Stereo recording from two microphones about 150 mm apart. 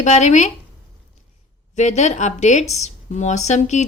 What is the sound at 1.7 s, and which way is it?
Speech, 50° left (ahead or behind).